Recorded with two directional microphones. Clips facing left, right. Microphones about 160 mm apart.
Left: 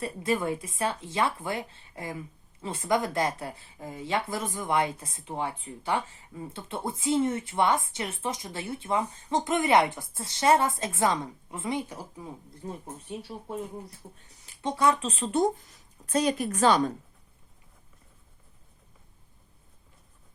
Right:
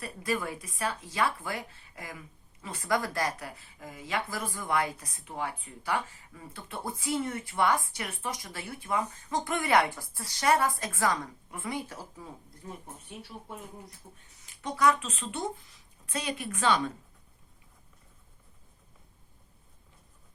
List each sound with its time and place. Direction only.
0.0 s speech: 25° left (ahead or behind)
12.6 s speech: 30° left (ahead or behind)